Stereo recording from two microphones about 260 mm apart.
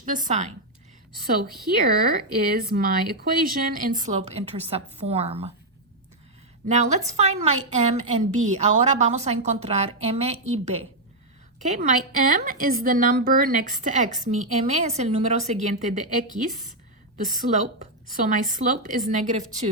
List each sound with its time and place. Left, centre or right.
0.0 s a woman's voice: right
1.9 s speech: right
6.7 s a woman's voice: right
18.3 s a woman's voice: right